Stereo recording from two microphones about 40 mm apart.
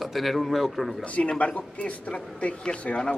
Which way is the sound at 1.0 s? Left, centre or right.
Left.